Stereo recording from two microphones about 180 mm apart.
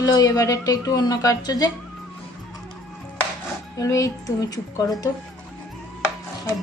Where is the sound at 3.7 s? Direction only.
20° left (ahead or behind).